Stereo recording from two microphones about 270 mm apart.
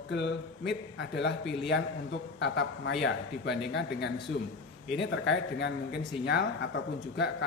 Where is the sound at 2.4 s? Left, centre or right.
Left.